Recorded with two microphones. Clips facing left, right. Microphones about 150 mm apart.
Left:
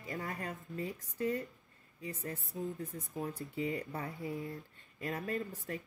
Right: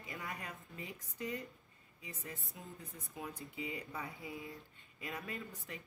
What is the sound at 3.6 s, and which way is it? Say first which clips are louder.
A woman's voice: left 7 dB; 45° left (ahead or behind).